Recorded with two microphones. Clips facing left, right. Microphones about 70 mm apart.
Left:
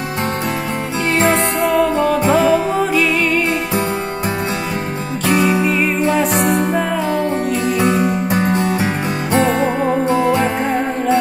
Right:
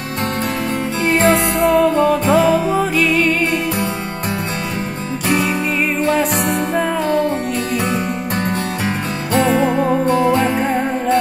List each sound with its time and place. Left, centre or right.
1.0 s music: centre
5.2 s music: centre
7.1 s music: centre
9.5 s music: centre